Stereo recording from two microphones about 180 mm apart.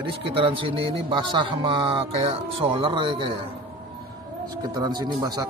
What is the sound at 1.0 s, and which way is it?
Speech, 30° right (ahead or behind).